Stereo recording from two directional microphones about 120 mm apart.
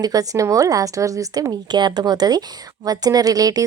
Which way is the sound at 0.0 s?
30° right (ahead or behind).